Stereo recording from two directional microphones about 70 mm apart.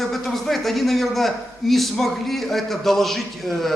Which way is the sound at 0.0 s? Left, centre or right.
Centre.